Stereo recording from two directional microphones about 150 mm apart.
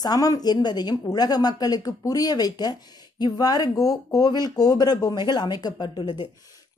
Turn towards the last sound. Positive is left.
turn(degrees=30)  # may be behind; listen again after turning